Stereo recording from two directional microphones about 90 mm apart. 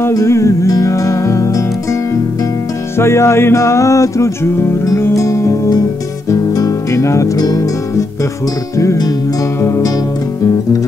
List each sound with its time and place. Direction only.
0.1 s music: 35° left (ahead or behind)
3.0 s music: 30° left (ahead or behind)
8.7 s music: 40° left (ahead or behind)